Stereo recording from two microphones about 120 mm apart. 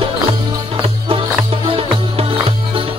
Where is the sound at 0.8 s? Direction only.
50° right (ahead or behind).